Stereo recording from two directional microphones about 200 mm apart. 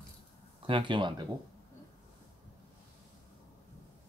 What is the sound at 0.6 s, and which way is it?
Speech, 25° right (ahead or behind).